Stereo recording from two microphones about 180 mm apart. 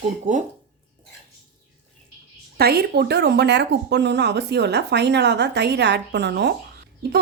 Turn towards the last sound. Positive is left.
turn(degrees=-65)  # may be behind; listen again after turning